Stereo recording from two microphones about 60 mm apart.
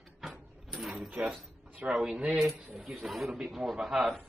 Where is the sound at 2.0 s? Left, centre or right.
Centre.